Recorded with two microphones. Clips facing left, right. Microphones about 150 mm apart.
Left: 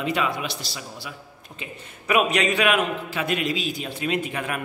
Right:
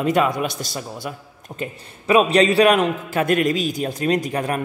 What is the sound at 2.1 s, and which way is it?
A man's voice, 30° right (ahead or behind).